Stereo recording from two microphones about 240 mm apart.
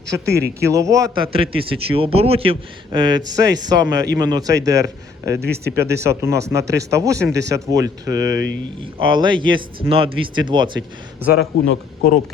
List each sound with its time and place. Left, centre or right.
0.1 s a man's voice: centre
11.3 s a man's voice: left